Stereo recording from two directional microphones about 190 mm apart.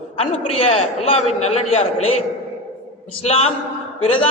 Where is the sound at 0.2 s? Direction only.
30° left (ahead or behind).